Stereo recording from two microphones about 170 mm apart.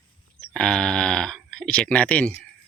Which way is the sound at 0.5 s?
5° left (ahead or behind).